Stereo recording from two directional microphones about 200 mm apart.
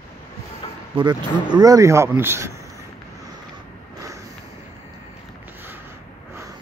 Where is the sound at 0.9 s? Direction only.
20° right (ahead or behind).